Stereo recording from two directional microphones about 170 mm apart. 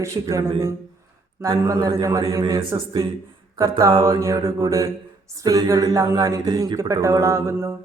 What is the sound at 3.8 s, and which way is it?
Speech, 25° right (ahead or behind).